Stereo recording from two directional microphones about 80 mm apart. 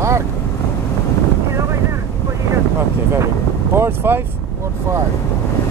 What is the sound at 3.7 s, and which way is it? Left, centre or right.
Speech, right.